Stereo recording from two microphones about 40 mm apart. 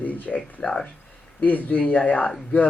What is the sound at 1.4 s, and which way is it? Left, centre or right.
Speech, left.